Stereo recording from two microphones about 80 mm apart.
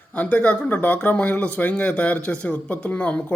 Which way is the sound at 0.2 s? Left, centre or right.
Centre.